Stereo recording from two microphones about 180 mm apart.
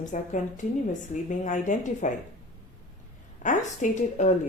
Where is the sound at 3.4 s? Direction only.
45° left (ahead or behind).